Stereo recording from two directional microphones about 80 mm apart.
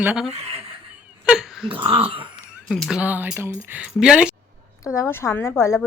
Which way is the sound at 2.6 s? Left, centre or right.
Centre.